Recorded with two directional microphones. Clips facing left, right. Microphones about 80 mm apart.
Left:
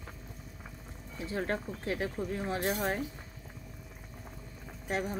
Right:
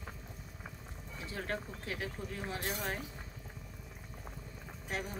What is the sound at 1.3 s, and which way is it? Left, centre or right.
Speech, left.